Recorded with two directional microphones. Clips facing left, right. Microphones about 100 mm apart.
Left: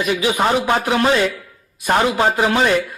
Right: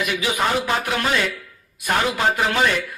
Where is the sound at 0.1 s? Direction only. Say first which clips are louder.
Left 7 dB; 30° left (ahead or behind).